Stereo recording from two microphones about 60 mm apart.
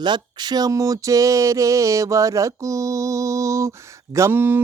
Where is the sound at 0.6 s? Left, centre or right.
Right.